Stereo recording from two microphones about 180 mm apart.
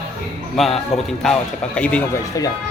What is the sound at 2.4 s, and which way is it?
Speech, 20° left (ahead or behind).